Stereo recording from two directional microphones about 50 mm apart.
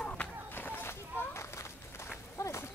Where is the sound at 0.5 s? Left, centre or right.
Left.